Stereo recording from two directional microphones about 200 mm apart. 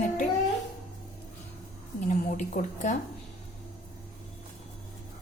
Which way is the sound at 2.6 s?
40° left (ahead or behind).